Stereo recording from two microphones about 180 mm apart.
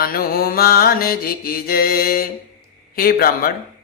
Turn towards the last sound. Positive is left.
turn(degrees=55)  # may be behind; listen again after turning